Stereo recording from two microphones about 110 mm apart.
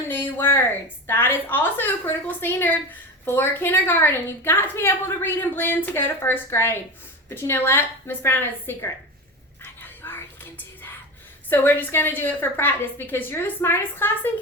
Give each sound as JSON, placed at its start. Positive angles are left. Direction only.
{"t": 0.1, "sound": "a sound", "side_deg": 20}
{"t": 1.0, "sound": "a woman's voice", "side_deg": 20}
{"t": 9.8, "sound": "whispering", "side_deg": 20}
{"t": 11.4, "sound": "a woman's voice", "side_deg": 20}